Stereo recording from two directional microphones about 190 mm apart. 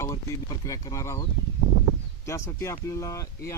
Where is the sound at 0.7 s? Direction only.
15° left (ahead or behind).